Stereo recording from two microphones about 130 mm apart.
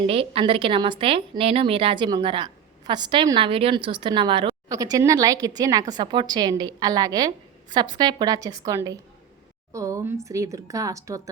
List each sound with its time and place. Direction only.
0.1 s a woman's voice: 45° right (ahead or behind)
4.7 s a woman's voice: 25° right (ahead or behind)